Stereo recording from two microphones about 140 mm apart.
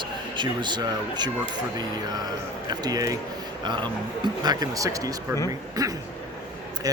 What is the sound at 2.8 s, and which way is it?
Speech, 25° right (ahead or behind).